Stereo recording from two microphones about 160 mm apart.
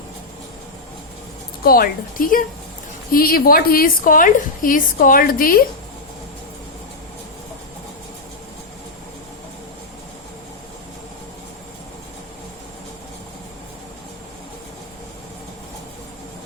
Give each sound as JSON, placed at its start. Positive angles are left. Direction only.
{"t": 1.6, "sound": "a woman's voice", "side_deg": 65}